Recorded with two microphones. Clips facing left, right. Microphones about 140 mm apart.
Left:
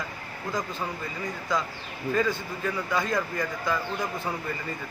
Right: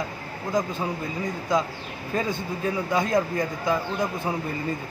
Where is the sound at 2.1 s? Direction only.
20° right (ahead or behind).